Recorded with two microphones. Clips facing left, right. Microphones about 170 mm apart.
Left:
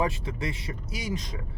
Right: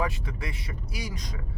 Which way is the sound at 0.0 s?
25° left (ahead or behind).